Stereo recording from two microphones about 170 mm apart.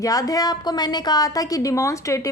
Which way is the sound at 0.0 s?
20° left (ahead or behind).